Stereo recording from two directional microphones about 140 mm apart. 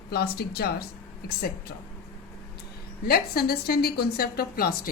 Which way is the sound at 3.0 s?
90° left.